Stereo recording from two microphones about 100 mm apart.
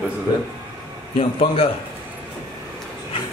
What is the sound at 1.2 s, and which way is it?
Speech, 70° left (ahead or behind).